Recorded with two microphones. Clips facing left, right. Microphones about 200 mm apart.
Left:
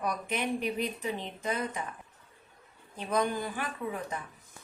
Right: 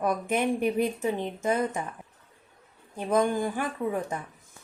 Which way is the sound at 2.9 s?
50° right (ahead or behind).